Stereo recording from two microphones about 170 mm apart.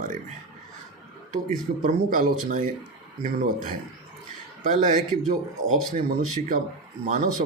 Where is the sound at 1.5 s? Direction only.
50° right (ahead or behind).